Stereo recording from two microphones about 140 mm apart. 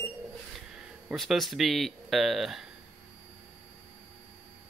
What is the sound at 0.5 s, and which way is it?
Speech, 5° right (ahead or behind).